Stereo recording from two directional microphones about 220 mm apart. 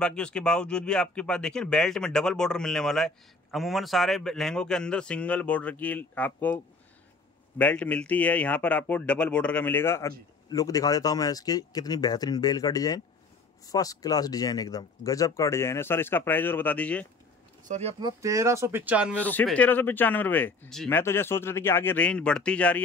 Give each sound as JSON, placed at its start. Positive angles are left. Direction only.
{"t": 0.0, "sound": "speech", "side_deg": 5}
{"t": 17.6, "sound": "speech", "side_deg": -30}
{"t": 18.0, "sound": "speech", "side_deg": -15}
{"t": 19.1, "sound": "speech", "side_deg": 5}